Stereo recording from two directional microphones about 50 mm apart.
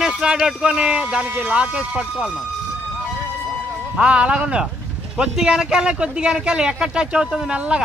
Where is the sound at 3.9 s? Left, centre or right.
Right.